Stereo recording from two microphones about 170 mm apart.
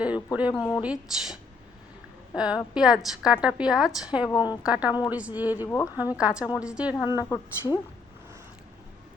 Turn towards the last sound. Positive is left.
turn(degrees=15)  # may be behind; listen again after turning